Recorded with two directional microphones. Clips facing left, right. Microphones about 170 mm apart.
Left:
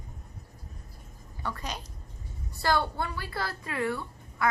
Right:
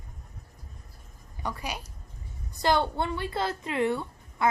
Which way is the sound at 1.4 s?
15° right (ahead or behind).